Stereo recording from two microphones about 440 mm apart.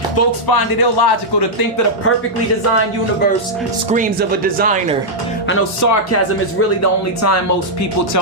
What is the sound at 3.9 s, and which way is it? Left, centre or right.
Speech, centre.